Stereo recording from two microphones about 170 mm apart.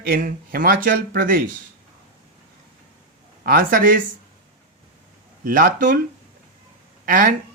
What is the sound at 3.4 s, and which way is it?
Speech, 55° right (ahead or behind).